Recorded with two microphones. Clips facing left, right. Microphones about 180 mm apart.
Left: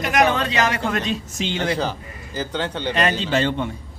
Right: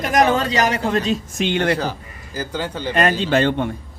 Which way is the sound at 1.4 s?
60° right (ahead or behind).